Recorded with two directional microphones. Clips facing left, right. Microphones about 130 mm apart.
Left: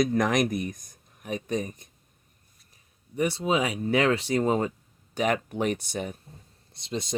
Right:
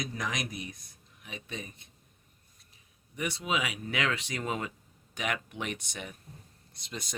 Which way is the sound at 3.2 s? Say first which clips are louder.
Left 8 dB; 35° left (ahead or behind).